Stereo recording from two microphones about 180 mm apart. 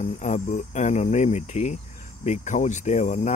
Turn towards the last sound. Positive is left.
turn(degrees=40)  # may be behind; listen again after turning